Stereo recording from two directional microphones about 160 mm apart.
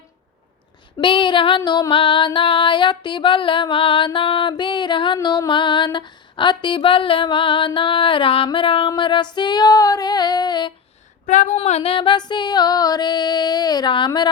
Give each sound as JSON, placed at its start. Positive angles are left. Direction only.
{"t": 0.9, "sound": "female singing", "side_deg": 30}
{"t": 11.3, "sound": "female singing", "side_deg": 45}